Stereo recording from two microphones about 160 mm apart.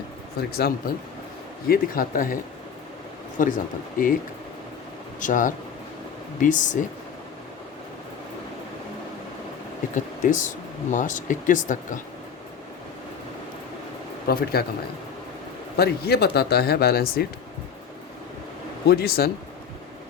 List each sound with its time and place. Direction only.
0.3 s speech: 75° left (ahead or behind)
1.6 s speech: 65° left (ahead or behind)
5.2 s speech: 55° left (ahead or behind)
9.9 s speech: 50° left (ahead or behind)
14.3 s speech: 75° left (ahead or behind)
15.7 s speech: 85° left
18.9 s speech: 75° left (ahead or behind)